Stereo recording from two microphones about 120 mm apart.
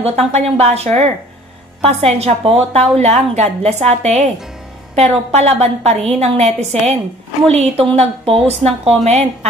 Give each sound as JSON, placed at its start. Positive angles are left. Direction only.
{"t": 0.0, "sound": "a woman's voice", "side_deg": -60}